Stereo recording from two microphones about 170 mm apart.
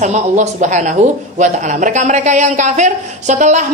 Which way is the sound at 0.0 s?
45° right (ahead or behind).